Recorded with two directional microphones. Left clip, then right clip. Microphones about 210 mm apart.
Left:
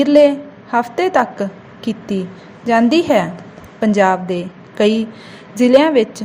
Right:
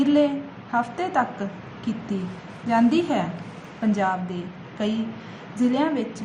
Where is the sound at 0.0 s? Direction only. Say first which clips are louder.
Left 10 dB; 30° left (ahead or behind).